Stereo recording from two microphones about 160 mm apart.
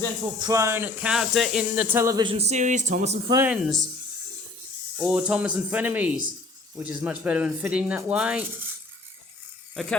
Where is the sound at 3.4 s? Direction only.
5° right (ahead or behind).